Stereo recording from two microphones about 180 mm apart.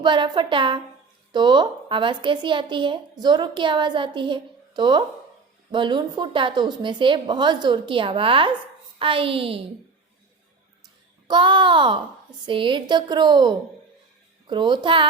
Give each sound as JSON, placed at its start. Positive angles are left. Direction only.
{"t": 0.0, "sound": "a woman's voice", "side_deg": -25}
{"t": 11.3, "sound": "a woman's voice", "side_deg": -25}